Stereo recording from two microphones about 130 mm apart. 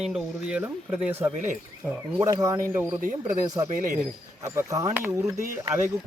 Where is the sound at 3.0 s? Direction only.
90° right.